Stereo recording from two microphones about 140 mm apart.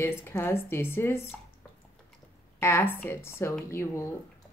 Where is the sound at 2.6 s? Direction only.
15° left (ahead or behind).